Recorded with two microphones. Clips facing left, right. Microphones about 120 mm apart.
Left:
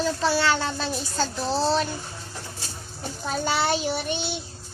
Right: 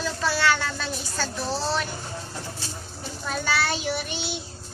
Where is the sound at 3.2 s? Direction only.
25° left (ahead or behind).